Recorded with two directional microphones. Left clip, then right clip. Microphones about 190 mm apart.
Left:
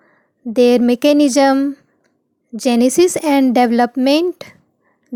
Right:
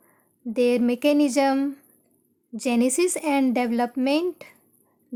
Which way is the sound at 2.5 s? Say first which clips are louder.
Left 9 dB; 30° left (ahead or behind).